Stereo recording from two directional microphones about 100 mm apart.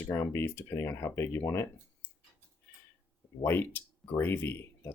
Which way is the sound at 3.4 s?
25° left (ahead or behind).